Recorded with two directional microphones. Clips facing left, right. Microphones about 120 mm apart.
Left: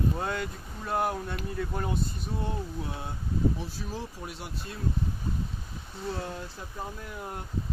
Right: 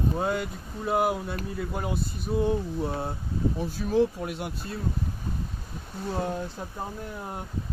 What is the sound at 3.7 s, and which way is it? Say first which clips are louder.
Speech: right 14 dB; 60° right (ahead or behind).